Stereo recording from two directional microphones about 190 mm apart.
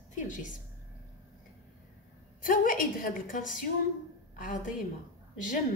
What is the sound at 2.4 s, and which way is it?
A woman's voice, 45° left (ahead or behind).